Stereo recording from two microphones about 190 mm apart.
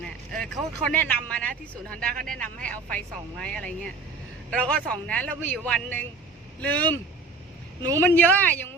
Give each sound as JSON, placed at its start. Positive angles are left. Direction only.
{"t": 0.3, "sound": "a man's voice", "side_deg": 5}
{"t": 7.8, "sound": "speech", "side_deg": -20}
{"t": 8.0, "sound": "a man's voice", "side_deg": 10}